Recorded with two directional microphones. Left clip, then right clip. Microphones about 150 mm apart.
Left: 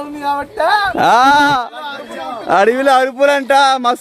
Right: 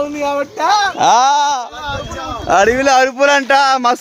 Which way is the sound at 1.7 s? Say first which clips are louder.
Right 2 dB; 15° left (ahead or behind).